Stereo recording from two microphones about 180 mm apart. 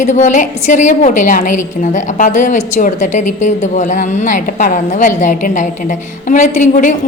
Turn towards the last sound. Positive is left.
turn(degrees=45)  # may be behind; listen again after turning